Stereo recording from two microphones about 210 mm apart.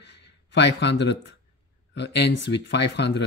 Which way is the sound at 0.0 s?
55° left (ahead or behind).